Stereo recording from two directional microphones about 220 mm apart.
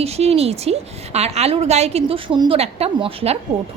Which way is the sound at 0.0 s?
30° right (ahead or behind).